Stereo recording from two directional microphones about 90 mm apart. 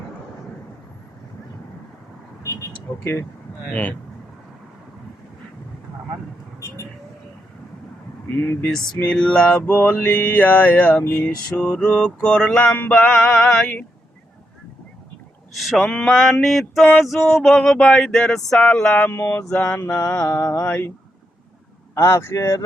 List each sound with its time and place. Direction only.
2.4 s vehicle: 35° left (ahead or behind)
3.7 s mantra: 15° left (ahead or behind)
9.0 s mantra: 10° left (ahead or behind)
15.5 s a sound: centre (ahead or behind)
19.1 s mantra: 25° left (ahead or behind)
21.9 s speech: 30° left (ahead or behind)